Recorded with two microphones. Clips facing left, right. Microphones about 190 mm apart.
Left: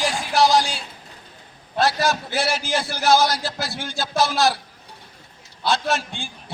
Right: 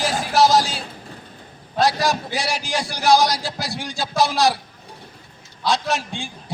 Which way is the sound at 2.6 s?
Centre (ahead or behind).